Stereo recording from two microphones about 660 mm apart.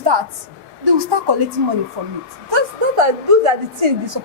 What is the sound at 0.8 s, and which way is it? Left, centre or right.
A woman's voice, right.